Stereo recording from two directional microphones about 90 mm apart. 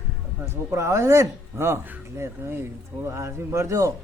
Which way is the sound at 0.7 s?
35° right (ahead or behind).